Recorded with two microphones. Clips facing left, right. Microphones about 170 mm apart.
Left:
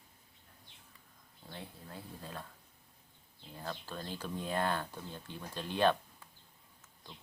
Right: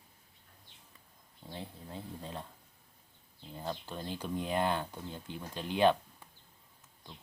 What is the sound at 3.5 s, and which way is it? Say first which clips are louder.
Speech: right 3 dB; 20° right (ahead or behind).